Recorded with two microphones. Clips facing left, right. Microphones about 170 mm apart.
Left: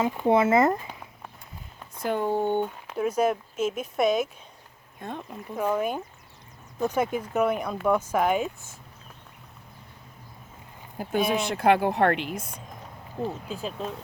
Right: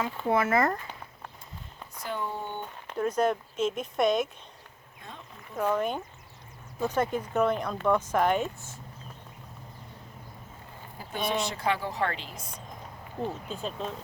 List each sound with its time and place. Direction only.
0.0 s speech: 20° left (ahead or behind)
2.0 s speech: 50° left (ahead or behind)
2.8 s speech: 5° left (ahead or behind)
4.9 s speech: 55° left (ahead or behind)
5.5 s speech: 5° left (ahead or behind)
10.9 s speech: 50° left (ahead or behind)
13.2 s speech: 5° left (ahead or behind)